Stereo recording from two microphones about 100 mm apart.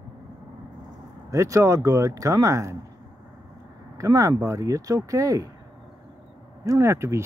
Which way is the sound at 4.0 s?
35° right (ahead or behind).